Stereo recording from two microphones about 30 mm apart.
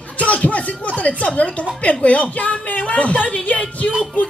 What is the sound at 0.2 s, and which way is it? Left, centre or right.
Music, left.